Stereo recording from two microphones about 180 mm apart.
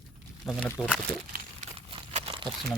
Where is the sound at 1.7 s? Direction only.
35° right (ahead or behind).